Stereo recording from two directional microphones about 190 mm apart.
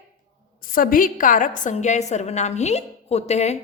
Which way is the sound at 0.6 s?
50° left (ahead or behind).